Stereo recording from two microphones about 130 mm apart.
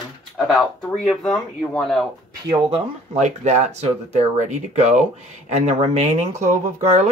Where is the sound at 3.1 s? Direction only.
65° right (ahead or behind).